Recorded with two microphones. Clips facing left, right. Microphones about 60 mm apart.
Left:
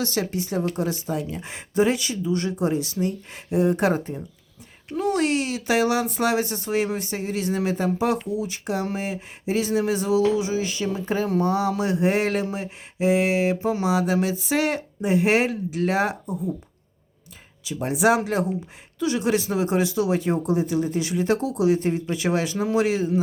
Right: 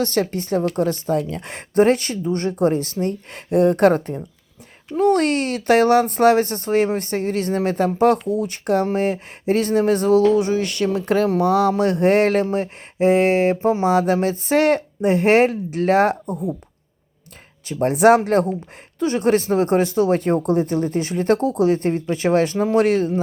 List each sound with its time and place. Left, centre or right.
0.0 s speech: right
11.8 s speech: right
17.7 s speech: right